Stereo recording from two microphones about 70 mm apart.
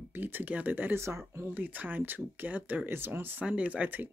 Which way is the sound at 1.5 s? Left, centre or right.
Right.